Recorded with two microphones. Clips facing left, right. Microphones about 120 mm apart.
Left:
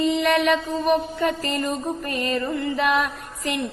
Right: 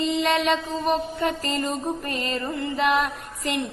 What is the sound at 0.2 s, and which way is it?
Music, 20° right (ahead or behind).